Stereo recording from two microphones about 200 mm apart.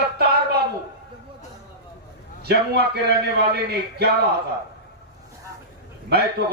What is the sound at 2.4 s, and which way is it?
A man's voice, 55° right (ahead or behind).